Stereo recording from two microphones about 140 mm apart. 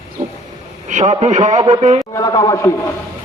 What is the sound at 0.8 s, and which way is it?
A man's voice, 60° right (ahead or behind).